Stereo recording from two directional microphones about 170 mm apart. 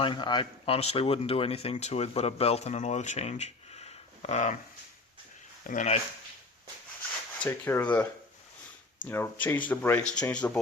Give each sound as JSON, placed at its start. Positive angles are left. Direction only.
{"t": 0.0, "sound": "speech", "side_deg": 25}
{"t": 5.6, "sound": "speech", "side_deg": 45}
{"t": 7.3, "sound": "speech", "side_deg": 10}
{"t": 9.0, "sound": "speech", "side_deg": 15}